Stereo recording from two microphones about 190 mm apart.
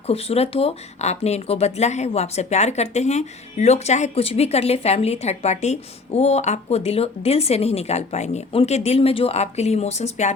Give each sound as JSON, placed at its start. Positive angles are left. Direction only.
{"t": 0.1, "sound": "speech", "side_deg": 30}